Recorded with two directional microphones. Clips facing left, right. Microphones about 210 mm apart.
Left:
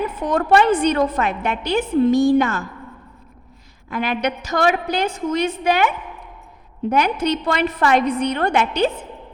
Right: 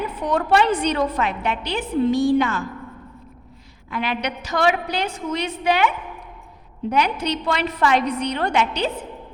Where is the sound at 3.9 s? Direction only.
45° left (ahead or behind).